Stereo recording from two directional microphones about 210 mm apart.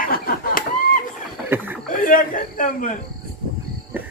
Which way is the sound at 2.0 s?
40° left (ahead or behind).